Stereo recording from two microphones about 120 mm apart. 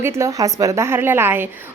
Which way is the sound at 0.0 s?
25° right (ahead or behind).